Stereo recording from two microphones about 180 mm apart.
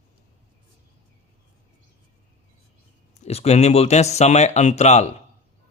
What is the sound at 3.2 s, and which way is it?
Speech, 35° left (ahead or behind).